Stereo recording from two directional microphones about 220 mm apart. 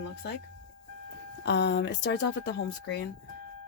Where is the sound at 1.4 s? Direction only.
50° left (ahead or behind).